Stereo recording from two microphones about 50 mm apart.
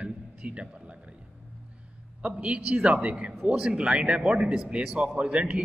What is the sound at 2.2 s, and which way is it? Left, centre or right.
A man's voice, right.